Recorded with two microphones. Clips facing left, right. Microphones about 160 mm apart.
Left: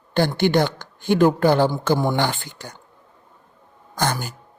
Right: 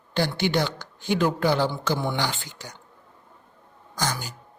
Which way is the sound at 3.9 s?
55° left (ahead or behind).